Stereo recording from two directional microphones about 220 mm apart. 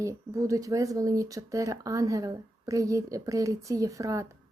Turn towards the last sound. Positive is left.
turn(degrees=-15)  # may be behind; listen again after turning